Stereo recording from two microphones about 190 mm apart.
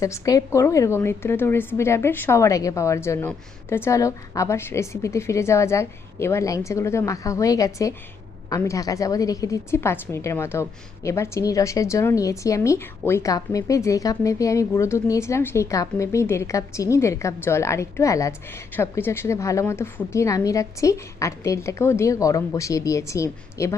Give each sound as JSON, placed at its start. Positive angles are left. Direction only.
{"t": 0.0, "sound": "a woman's voice", "side_deg": 15}